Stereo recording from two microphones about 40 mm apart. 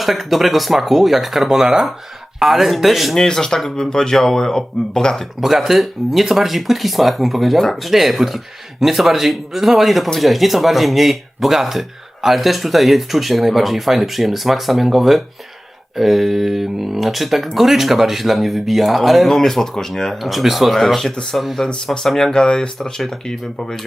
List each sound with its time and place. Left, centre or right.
0.0 s speech: centre
3.2 s speech: centre
5.4 s speech: centre
19.3 s speech: centre
20.1 s speech: centre
21.9 s speech: centre